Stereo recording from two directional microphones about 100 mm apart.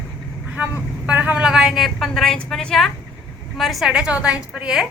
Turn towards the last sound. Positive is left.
turn(degrees=-10)  # may be behind; listen again after turning